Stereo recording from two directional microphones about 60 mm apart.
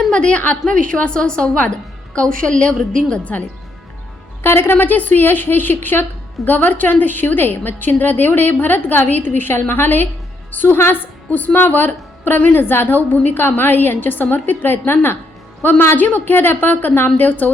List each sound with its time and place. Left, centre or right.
0.1 s a woman's voice: centre
4.4 s a woman's voice: left